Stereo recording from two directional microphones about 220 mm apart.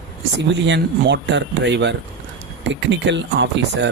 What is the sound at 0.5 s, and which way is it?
Speech, 55° right (ahead or behind).